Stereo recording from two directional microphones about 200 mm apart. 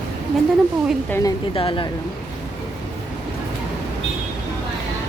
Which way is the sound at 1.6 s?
25° left (ahead or behind).